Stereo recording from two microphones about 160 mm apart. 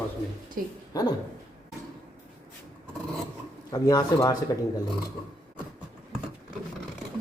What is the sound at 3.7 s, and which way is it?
Speech, 25° left (ahead or behind).